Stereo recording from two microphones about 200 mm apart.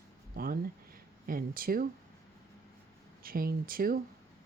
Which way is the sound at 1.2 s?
45° right (ahead or behind).